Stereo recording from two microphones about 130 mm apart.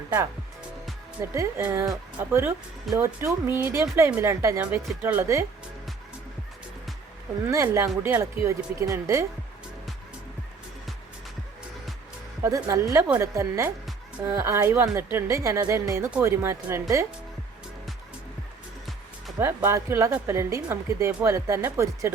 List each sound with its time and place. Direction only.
1.2 s speech: 20° right (ahead or behind)
7.4 s speech: 25° right (ahead or behind)
12.4 s speech: 25° right (ahead or behind)
19.4 s speech: 20° right (ahead or behind)